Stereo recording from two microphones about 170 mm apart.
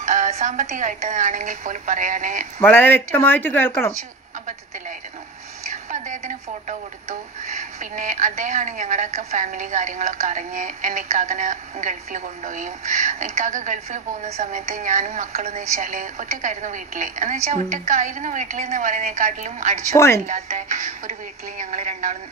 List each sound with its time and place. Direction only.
0.0 s speech: 45° right (ahead or behind)
2.6 s speech: 10° left (ahead or behind)
5.7 s speech: 45° right (ahead or behind)